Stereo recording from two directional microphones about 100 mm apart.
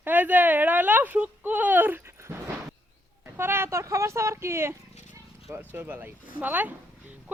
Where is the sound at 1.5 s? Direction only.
15° right (ahead or behind).